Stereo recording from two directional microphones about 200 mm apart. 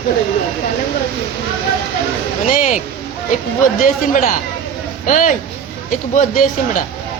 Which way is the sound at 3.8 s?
40° left (ahead or behind).